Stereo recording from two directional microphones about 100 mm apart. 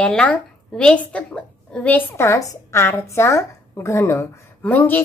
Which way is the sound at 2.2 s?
30° left (ahead or behind).